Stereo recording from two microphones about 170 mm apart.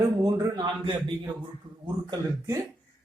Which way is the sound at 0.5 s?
25° right (ahead or behind).